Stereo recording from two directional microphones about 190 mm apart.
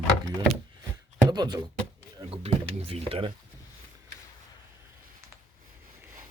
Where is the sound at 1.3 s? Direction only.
20° right (ahead or behind).